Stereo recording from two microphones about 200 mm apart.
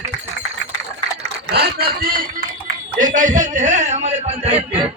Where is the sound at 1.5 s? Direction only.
55° right (ahead or behind); by 4.6 s 30° right (ahead or behind).